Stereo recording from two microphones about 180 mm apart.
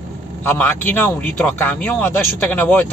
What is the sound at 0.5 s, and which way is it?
Speech, 10° left (ahead or behind).